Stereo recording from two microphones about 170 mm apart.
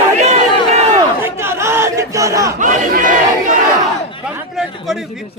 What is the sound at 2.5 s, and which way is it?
Speech, 45° right (ahead or behind).